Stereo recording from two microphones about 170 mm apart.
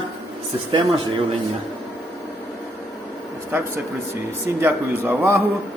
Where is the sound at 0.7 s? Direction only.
30° right (ahead or behind).